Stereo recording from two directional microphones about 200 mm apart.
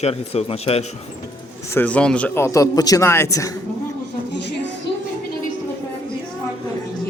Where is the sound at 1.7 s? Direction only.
10° left (ahead or behind).